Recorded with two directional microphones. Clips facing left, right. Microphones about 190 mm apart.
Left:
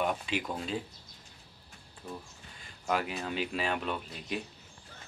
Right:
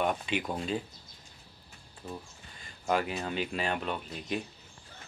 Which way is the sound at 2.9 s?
Centre (ahead or behind).